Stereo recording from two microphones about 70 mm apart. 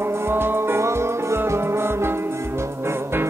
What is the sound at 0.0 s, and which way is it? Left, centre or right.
Music, right.